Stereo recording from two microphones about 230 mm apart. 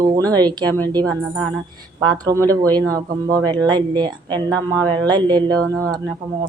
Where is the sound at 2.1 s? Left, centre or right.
Centre.